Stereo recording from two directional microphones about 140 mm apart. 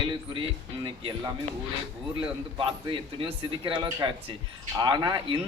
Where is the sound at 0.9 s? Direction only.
35° right (ahead or behind).